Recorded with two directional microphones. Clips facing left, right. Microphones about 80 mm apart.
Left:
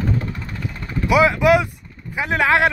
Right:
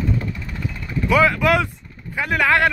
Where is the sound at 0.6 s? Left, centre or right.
Centre.